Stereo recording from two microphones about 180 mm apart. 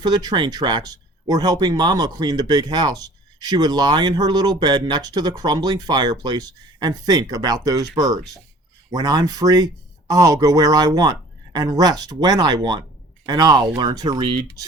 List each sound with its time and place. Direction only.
0.0 s speech: 20° right (ahead or behind)